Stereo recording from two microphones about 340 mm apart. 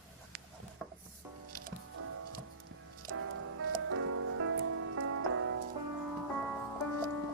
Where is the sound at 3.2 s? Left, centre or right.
Right.